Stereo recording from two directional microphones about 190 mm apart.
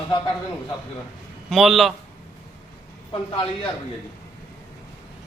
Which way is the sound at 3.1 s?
25° left (ahead or behind).